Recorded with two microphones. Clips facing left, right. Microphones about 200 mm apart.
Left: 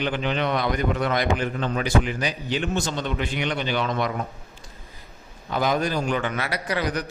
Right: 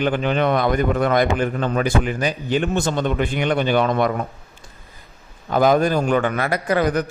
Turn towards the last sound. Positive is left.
turn(degrees=-50)  # may be behind; listen again after turning